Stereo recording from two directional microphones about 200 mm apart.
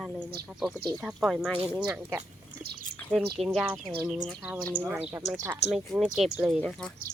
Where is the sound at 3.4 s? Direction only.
5° right (ahead or behind).